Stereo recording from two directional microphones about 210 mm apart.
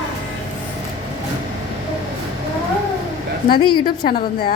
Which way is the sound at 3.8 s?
45° left (ahead or behind).